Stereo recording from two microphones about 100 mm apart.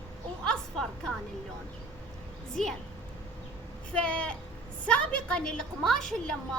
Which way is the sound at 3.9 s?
10° left (ahead or behind).